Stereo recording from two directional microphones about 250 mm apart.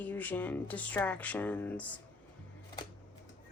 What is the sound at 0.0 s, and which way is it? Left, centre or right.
Speech, centre.